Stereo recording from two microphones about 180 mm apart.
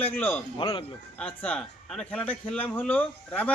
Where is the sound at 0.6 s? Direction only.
30° left (ahead or behind).